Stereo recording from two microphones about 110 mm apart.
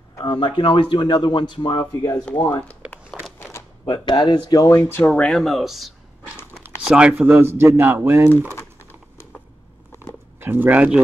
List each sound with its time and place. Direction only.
0.2 s speech: 50° left (ahead or behind)
1.8 s speech: 30° left (ahead or behind)
3.1 s a sound: 5° right (ahead or behind)
3.8 s speech: 45° left (ahead or behind); by 8.3 s 20° right (ahead or behind)
10.4 s speech: 15° right (ahead or behind)